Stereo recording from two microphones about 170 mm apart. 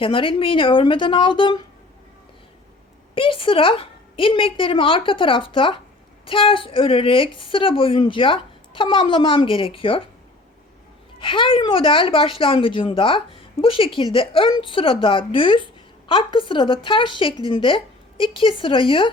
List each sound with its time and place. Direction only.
0.0 s a woman's voice: 30° left (ahead or behind)
3.2 s a woman's voice: 30° left (ahead or behind)
11.2 s a woman's voice: 30° left (ahead or behind)